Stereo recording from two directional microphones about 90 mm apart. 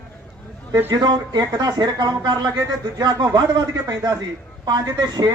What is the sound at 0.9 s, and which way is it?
A man's voice, 50° right (ahead or behind).